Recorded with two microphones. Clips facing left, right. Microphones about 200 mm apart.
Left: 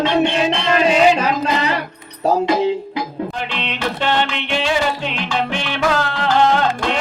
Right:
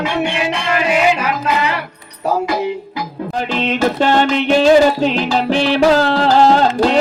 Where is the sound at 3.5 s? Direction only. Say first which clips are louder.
Right 8 dB; 45° right (ahead or behind).